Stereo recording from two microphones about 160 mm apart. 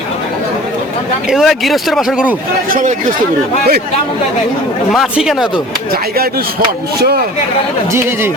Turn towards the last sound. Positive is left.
turn(degrees=-80)